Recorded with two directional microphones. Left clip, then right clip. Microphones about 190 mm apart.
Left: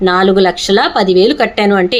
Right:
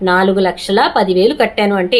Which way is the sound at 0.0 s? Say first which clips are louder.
Left 3 dB; 25° left (ahead or behind).